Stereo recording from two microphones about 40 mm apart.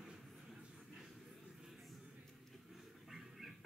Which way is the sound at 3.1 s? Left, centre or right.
Centre.